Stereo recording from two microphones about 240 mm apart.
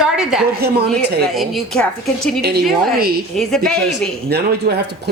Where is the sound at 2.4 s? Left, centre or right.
Right.